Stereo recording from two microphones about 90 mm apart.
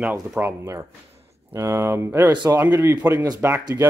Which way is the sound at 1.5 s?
30° right (ahead or behind).